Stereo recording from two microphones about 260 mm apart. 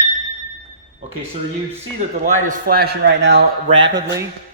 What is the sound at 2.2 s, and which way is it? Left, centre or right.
A man's voice, right.